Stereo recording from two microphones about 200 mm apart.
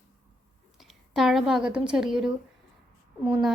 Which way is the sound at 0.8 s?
Centre (ahead or behind).